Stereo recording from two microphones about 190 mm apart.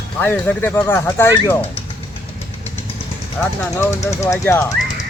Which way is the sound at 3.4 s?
5° left (ahead or behind).